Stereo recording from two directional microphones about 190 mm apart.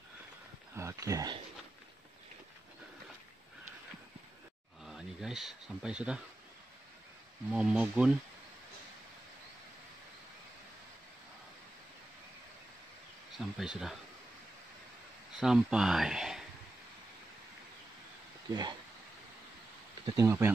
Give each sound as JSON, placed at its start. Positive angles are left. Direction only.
{"t": 0.7, "sound": "speech", "side_deg": -15}
{"t": 4.8, "sound": "speech", "side_deg": 0}
{"t": 7.5, "sound": "speech", "side_deg": -5}
{"t": 13.4, "sound": "speech", "side_deg": -5}
{"t": 15.3, "sound": "speech", "side_deg": -5}
{"t": 18.5, "sound": "speech", "side_deg": -20}
{"t": 20.1, "sound": "speech", "side_deg": -15}